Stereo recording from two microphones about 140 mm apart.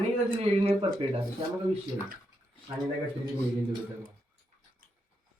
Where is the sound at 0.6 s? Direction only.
50° right (ahead or behind).